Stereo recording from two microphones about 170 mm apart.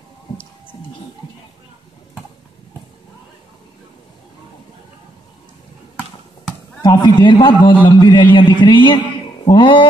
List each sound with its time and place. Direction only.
6.8 s a man's voice: 25° left (ahead or behind)